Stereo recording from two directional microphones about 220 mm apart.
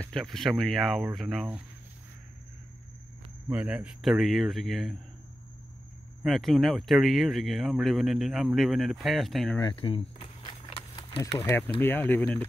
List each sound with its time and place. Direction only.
0.0 s speech: centre (ahead or behind)
3.4 s speech: 5° right (ahead or behind)
6.2 s speech: centre (ahead or behind)
9.6 s a sound: 20° left (ahead or behind)
11.1 s speech: 10° left (ahead or behind)